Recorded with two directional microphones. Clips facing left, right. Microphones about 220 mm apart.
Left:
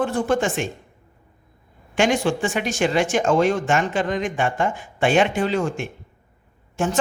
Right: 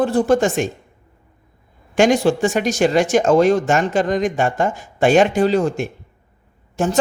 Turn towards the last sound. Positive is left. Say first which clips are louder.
# right 3 dB
turn(degrees=-40)  # may be behind; listen again after turning